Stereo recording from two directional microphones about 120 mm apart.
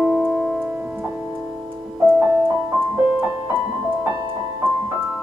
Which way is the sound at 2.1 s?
10° right (ahead or behind).